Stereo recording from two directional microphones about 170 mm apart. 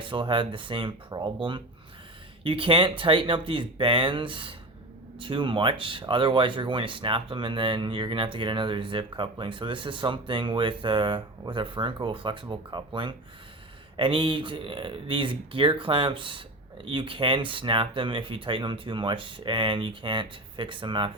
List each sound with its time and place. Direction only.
0.0 s speech: 30° right (ahead or behind)